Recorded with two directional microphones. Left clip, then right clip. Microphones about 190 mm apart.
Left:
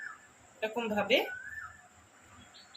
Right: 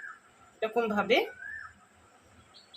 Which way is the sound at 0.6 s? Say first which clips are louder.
Right 4 dB; 40° right (ahead or behind).